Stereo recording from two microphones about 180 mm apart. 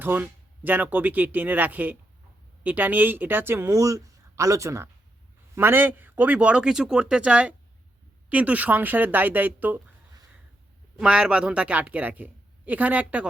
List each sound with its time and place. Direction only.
0.0 s speech: 10° right (ahead or behind)
11.0 s speech: 5° right (ahead or behind)